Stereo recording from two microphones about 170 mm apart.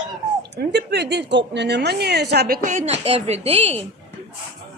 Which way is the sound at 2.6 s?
45° right (ahead or behind).